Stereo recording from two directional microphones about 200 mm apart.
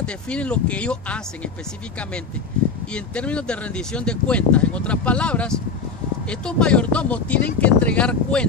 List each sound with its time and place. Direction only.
0.0 s speech: 5° left (ahead or behind)
2.9 s speech: 5° left (ahead or behind)